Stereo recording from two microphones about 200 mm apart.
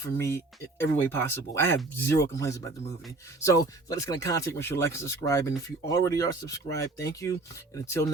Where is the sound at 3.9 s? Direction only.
15° left (ahead or behind).